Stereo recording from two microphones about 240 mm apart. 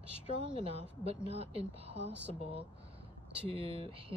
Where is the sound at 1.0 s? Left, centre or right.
Right.